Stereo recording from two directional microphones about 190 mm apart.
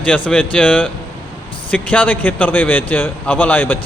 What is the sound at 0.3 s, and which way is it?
A man's voice, 5° left (ahead or behind).